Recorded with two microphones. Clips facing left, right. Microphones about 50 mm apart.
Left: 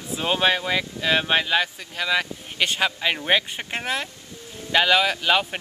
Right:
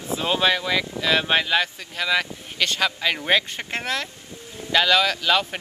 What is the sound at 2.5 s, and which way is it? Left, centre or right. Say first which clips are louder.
Speech: even; left.